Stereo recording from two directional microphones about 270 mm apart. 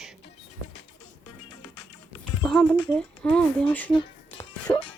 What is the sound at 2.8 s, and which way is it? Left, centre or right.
Speech, centre.